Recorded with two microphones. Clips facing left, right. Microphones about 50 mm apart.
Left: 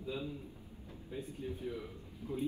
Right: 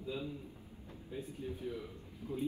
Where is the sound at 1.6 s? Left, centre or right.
Left.